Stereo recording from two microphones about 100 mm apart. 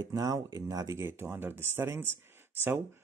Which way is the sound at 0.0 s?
35° right (ahead or behind).